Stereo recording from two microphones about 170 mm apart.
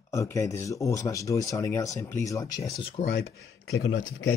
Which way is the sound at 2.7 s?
35° left (ahead or behind).